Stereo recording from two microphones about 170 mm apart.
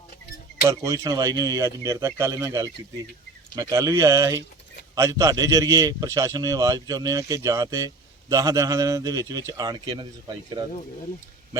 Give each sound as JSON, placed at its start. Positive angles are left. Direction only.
{"t": 0.6, "sound": "a man's voice", "side_deg": -20}